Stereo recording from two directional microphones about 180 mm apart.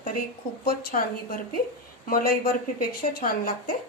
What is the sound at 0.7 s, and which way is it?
Speech, 55° left (ahead or behind).